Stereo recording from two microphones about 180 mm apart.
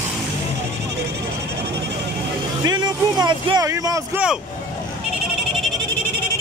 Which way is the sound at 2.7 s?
25° right (ahead or behind).